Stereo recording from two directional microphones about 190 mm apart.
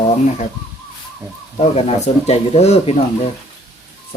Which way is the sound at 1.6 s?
35° left (ahead or behind).